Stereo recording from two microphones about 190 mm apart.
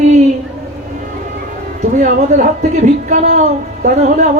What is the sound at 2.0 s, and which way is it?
A woman's voice, 40° right (ahead or behind).